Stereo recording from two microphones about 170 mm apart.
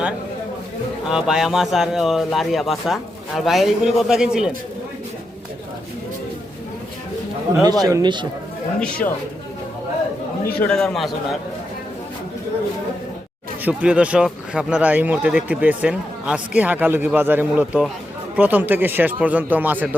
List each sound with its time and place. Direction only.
1.0 s speech: 5° right (ahead or behind)
7.6 s a man's voice: 20° right (ahead or behind)
10.4 s speech: 5° left (ahead or behind)
13.7 s speech: 5° right (ahead or behind)